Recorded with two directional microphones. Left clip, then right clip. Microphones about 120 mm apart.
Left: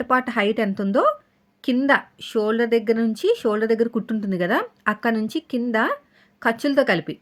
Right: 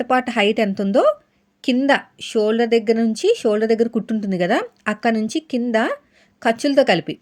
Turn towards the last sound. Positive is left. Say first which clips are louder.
# right 4 dB
turn(degrees=-25)  # may be behind; listen again after turning